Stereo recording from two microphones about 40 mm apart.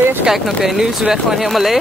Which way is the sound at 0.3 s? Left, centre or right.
Centre.